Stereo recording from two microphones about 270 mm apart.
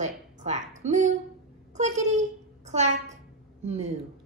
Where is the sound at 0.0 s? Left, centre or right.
Right.